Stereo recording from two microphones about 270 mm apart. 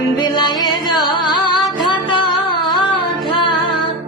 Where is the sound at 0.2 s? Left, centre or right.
Centre.